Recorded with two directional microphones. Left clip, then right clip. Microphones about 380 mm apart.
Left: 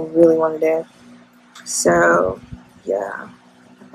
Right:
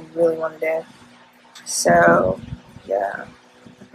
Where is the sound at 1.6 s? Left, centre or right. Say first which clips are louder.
Even; centre.